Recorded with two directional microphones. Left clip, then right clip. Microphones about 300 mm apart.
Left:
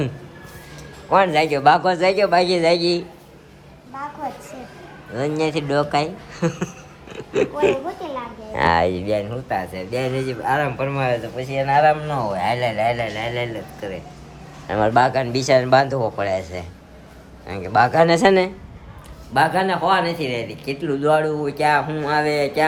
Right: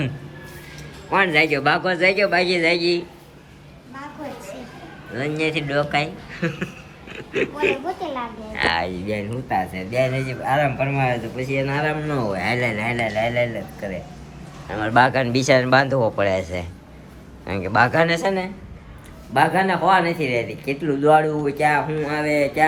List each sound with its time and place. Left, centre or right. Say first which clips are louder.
1.1 s speech: left 1 dB; centre
5.4 s speech: left 1 dB; centre
8.6 s speech: left 4 dB; left
9.1 s speech: left 1 dB; centre
12.0 s speech: left 2 dB; left
12.5 s speech: left 2 dB; centre
14.7 s speech: left 6 dB; centre
14.9 s speech: right 4 dB; centre
18.2 s speech: left 7 dB; left
19.3 s speech: even; centre